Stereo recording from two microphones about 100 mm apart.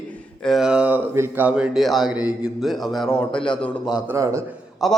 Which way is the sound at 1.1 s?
25° right (ahead or behind).